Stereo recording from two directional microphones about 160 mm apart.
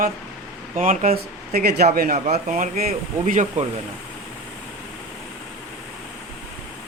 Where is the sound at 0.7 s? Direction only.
55° right (ahead or behind).